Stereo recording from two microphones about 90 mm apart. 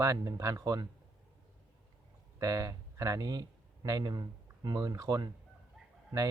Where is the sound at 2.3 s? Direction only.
40° right (ahead or behind).